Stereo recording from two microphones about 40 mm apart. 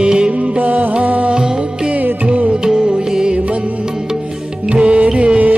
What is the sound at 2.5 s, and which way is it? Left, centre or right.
Music, right.